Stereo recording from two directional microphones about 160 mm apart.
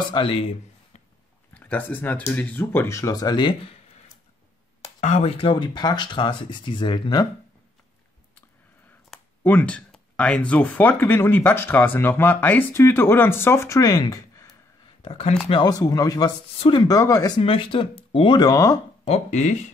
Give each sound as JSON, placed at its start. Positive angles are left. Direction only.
{"t": 0.0, "sound": "speech", "side_deg": 30}
{"t": 1.5, "sound": "speech", "side_deg": 10}
{"t": 5.0, "sound": "speech", "side_deg": 40}
{"t": 9.4, "sound": "speech", "side_deg": 10}
{"t": 15.0, "sound": "speech", "side_deg": 40}
{"t": 15.5, "sound": "speech", "side_deg": 25}
{"t": 17.4, "sound": "speech", "side_deg": 35}
{"t": 19.0, "sound": "speech", "side_deg": 45}